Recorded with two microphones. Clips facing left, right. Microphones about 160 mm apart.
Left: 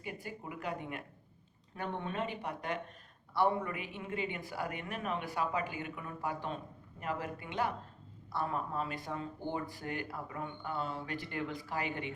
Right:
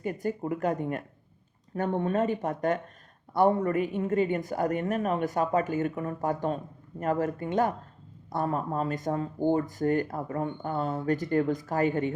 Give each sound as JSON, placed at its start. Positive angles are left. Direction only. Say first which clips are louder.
{"t": 0.0, "sound": "speech", "louder": "right 13 dB", "side_deg": -45}